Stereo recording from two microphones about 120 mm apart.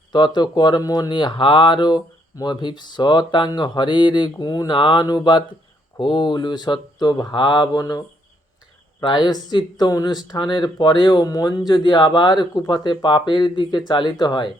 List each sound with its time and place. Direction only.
0.1 s speech: 40° left (ahead or behind)